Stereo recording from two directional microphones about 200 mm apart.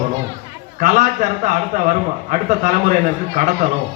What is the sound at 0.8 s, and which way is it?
A man's voice, 40° right (ahead or behind).